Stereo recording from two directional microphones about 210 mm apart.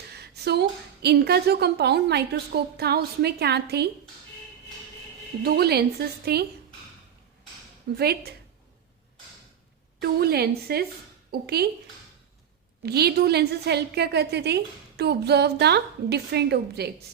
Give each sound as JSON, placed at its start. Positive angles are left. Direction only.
{"t": 0.2, "sound": "a woman's voice", "side_deg": -50}
{"t": 5.4, "sound": "a woman's voice", "side_deg": -50}
{"t": 7.9, "sound": "a woman's voice", "side_deg": -50}
{"t": 10.0, "sound": "a woman's voice", "side_deg": -50}
{"t": 12.8, "sound": "a woman's voice", "side_deg": -50}